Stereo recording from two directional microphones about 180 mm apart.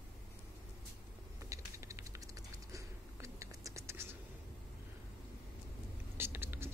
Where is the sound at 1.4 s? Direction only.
15° right (ahead or behind).